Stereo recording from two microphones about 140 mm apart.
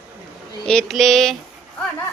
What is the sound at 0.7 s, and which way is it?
Speech, 5° left (ahead or behind).